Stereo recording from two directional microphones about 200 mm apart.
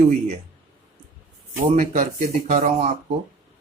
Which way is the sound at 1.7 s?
45° right (ahead or behind).